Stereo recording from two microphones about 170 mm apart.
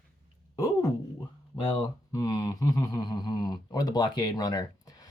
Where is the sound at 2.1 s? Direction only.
20° left (ahead or behind).